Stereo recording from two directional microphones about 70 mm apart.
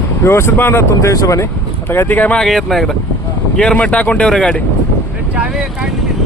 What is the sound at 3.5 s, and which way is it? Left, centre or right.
Speech, centre.